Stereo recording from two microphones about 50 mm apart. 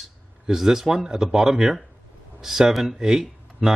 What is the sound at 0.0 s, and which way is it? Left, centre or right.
A man's voice, centre.